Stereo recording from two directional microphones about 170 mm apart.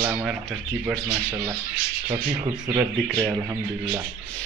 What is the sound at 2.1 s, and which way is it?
Speech, 25° right (ahead or behind).